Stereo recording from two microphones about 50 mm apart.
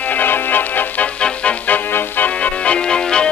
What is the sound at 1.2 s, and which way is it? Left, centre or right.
Music, left.